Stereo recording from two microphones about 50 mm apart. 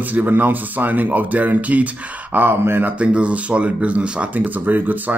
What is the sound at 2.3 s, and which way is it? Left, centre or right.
Speech, right.